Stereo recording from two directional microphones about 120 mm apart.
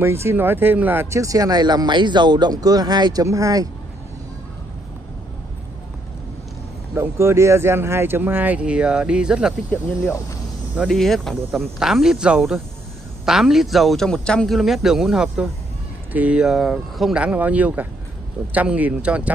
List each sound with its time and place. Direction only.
0.0 s speech: 20° right (ahead or behind)
7.0 s speech: 25° right (ahead or behind); by 9.5 s 5° right (ahead or behind)
10.9 s a man's voice: 5° left (ahead or behind)